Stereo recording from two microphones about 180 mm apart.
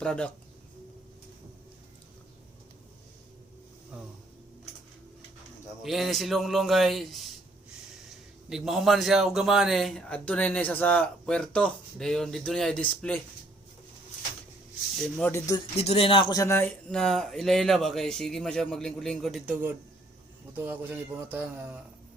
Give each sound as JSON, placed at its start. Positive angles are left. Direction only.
{"t": 0.0, "sound": "a man's voice", "side_deg": 5}
{"t": 5.8, "sound": "a man's voice", "side_deg": 0}
{"t": 8.4, "sound": "a man's voice", "side_deg": 0}
{"t": 15.2, "sound": "speech", "side_deg": 15}
{"t": 15.7, "sound": "speech", "side_deg": 35}
{"t": 16.3, "sound": "a man's voice", "side_deg": 15}
{"t": 20.6, "sound": "speech", "side_deg": -10}